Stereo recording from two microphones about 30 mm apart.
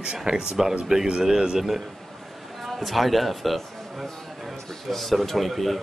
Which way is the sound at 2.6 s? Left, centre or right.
Centre.